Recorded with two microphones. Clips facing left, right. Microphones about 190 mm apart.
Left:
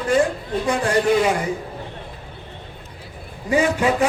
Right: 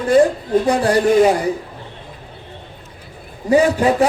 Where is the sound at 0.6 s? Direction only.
35° right (ahead or behind).